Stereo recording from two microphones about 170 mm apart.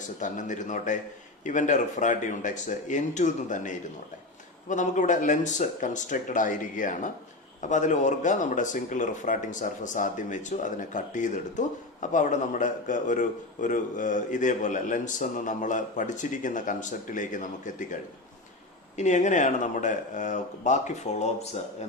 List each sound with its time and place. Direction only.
0.2 s speech: 50° left (ahead or behind)
18.9 s speech: 45° left (ahead or behind)